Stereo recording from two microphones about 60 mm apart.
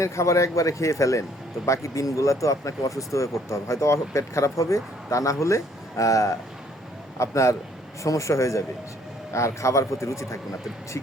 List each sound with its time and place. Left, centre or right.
0.0 s speech: left